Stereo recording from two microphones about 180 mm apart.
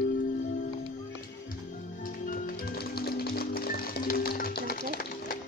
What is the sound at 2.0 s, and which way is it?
Music, 50° left (ahead or behind).